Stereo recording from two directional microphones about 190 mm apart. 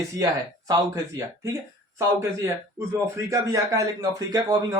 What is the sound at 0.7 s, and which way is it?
Speech, 15° right (ahead or behind).